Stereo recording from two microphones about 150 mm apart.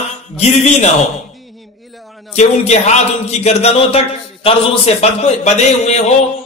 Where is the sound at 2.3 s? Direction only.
50° left (ahead or behind).